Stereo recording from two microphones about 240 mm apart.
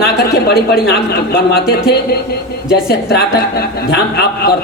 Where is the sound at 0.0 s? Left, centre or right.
Left.